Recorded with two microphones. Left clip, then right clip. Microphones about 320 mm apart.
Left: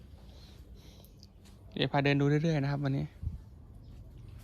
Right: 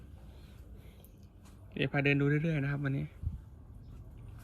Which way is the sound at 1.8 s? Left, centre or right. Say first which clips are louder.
Left 2 dB; left.